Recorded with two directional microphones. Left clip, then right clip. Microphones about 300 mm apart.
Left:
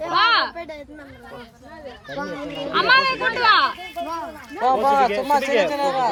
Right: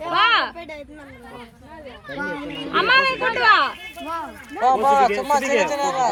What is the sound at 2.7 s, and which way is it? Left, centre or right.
Speech, centre.